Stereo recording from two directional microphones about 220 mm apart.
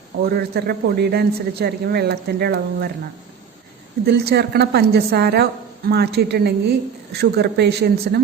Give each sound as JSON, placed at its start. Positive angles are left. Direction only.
{"t": 0.2, "sound": "a man's voice", "side_deg": -45}
{"t": 4.0, "sound": "a man's voice", "side_deg": -45}